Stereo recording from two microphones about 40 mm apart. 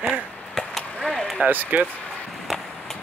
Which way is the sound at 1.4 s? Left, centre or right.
Right.